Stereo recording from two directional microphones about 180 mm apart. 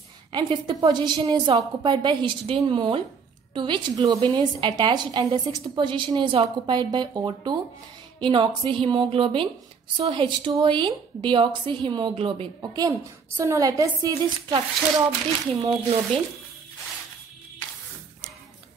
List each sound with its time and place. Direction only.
0.3 s a woman's voice: 25° right (ahead or behind)
15.6 s a woman's voice: 25° right (ahead or behind)